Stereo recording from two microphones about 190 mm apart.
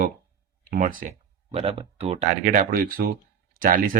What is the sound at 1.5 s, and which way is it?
Speech, 30° right (ahead or behind).